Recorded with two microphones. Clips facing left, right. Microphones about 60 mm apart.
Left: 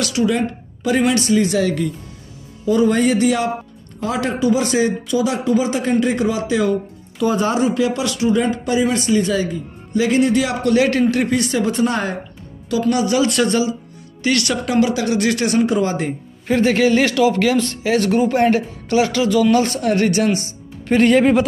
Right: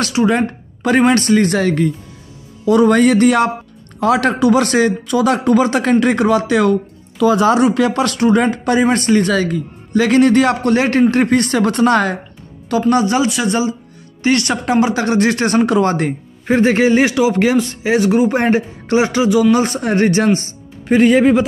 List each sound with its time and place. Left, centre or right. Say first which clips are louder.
0.0 s a sound: right 3 dB; right
1.0 s speech: right 4 dB; right
2.6 s a man's voice: right 4 dB; right
4.0 s a man's voice: right 6 dB; right
7.3 s a man's voice: right 4 dB; right
12.9 s a man's voice: right 1 dB; right
15.6 s a man's voice: right 4 dB; right
16.4 s a man's voice: right 3 dB; right; by 18.3 s centre
18.3 s a man's voice: right 1 dB; right
20.9 s a man's voice: right 2 dB; centre